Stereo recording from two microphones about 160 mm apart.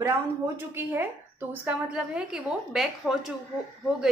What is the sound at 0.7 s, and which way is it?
A woman's voice, 15° right (ahead or behind).